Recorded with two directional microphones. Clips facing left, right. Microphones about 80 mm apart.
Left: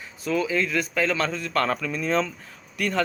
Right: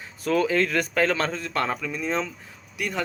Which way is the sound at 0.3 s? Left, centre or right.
Right.